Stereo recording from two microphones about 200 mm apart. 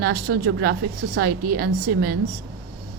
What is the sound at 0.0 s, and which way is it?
A woman's voice, 50° right (ahead or behind).